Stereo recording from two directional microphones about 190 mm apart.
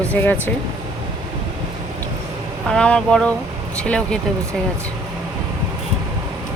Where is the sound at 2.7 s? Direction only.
5° left (ahead or behind).